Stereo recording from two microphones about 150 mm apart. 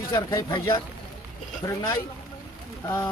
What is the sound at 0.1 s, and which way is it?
Speech, 25° left (ahead or behind).